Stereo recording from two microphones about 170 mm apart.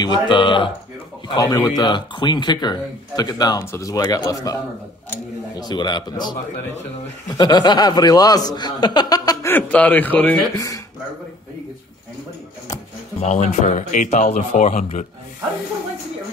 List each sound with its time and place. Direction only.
0.0 s speech: 25° left (ahead or behind)
5.6 s speech: 25° left (ahead or behind)
7.3 s speech: 25° left (ahead or behind)
9.5 s a man's voice: 10° left (ahead or behind)
13.2 s speech: 45° left (ahead or behind)